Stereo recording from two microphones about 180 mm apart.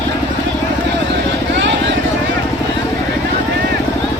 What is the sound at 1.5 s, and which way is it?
Vehicle, 80° right.